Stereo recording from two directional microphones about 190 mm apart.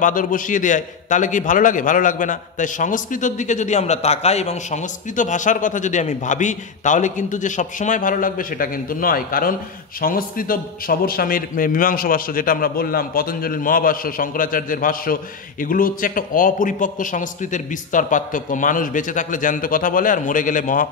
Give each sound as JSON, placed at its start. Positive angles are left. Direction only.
{"t": 0.0, "sound": "a man's voice", "side_deg": 45}